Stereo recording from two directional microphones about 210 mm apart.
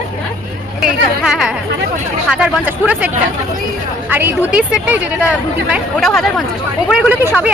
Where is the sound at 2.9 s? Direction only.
5° right (ahead or behind).